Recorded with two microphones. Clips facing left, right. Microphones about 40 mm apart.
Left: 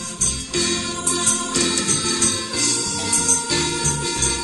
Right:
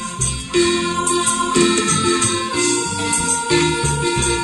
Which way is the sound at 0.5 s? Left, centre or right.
Right.